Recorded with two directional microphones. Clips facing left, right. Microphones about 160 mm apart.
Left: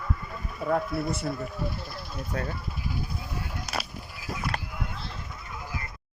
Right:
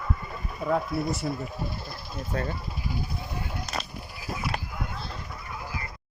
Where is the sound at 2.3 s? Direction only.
5° left (ahead or behind).